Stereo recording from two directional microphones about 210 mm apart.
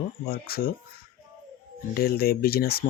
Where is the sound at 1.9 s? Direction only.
45° left (ahead or behind).